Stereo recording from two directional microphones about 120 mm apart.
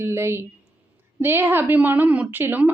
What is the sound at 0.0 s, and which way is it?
A woman's voice, 20° right (ahead or behind).